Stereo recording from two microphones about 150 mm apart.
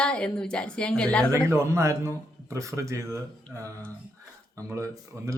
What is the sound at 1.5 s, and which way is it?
A man's voice, 20° right (ahead or behind).